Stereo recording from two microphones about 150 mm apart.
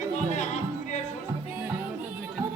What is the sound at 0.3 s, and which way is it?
Music, 50° left (ahead or behind).